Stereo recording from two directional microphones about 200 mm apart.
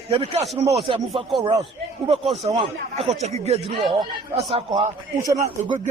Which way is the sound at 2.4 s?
30° right (ahead or behind).